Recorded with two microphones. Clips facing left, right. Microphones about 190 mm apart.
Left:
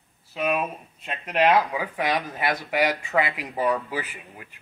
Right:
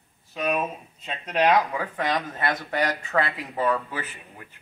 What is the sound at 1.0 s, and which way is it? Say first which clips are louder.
Speech: left 1 dB; 5° left (ahead or behind).